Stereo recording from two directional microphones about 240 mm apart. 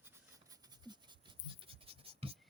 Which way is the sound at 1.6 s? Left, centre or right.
Right.